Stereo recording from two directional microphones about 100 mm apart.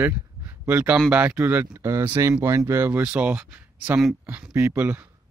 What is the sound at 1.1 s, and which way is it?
Speech, 15° right (ahead or behind).